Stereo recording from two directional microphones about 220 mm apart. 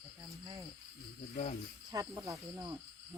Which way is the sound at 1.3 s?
30° left (ahead or behind).